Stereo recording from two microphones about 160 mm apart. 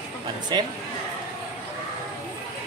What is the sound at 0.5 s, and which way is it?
Speech, 30° right (ahead or behind).